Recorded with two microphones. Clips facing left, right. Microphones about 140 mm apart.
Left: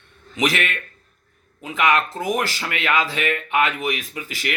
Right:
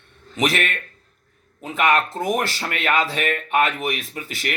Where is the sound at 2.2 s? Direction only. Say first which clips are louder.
Even; 25° right (ahead or behind).